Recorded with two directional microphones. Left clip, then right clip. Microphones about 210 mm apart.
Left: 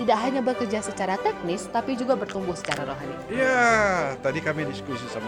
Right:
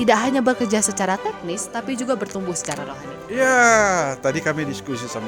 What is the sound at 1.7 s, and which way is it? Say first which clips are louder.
Speech: even; 30° right (ahead or behind).